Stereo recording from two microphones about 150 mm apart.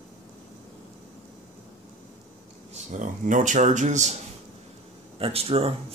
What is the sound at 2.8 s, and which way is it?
Speech, 55° right (ahead or behind).